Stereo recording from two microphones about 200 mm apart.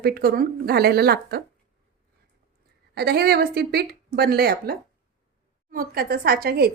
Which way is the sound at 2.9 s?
55° right (ahead or behind).